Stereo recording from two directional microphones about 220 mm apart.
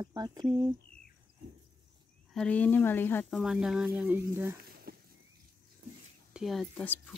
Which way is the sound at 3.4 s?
Centre (ahead or behind).